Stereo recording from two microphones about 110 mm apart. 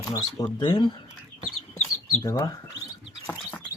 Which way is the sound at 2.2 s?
30° left (ahead or behind).